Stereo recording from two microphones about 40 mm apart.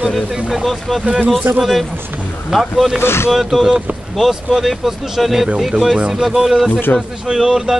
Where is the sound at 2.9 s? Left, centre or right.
Left.